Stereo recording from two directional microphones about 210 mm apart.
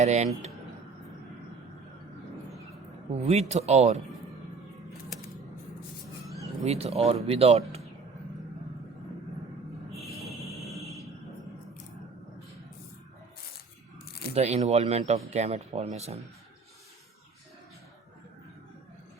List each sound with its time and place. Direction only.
0.0 s speech: 30° right (ahead or behind)
3.1 s speech: 30° right (ahead or behind)
6.7 s speech: 30° right (ahead or behind)
10.8 s a sound: 15° left (ahead or behind)
14.3 s speech: 30° right (ahead or behind)